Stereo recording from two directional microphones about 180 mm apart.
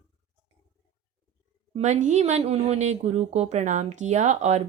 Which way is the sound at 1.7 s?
40° right (ahead or behind).